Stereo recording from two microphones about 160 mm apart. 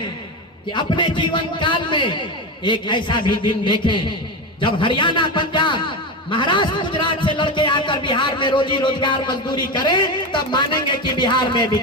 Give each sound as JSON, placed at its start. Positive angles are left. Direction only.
{"t": 0.7, "sound": "a man's voice", "side_deg": 30}